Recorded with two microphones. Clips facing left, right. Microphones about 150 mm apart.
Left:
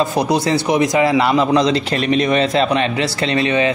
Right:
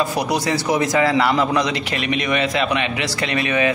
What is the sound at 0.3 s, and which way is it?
A man's voice, 25° left (ahead or behind).